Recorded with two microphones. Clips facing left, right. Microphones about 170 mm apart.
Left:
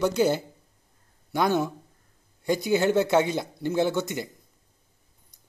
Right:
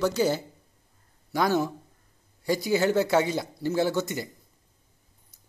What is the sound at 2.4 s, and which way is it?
Speech, 20° left (ahead or behind).